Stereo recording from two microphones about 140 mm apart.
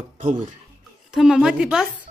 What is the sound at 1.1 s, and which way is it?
Speech, 5° right (ahead or behind).